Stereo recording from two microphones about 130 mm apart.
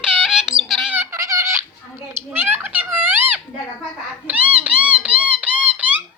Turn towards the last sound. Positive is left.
turn(degrees=-10)  # may be behind; listen again after turning